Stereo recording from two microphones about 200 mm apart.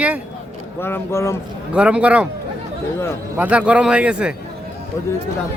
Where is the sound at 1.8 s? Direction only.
5° right (ahead or behind).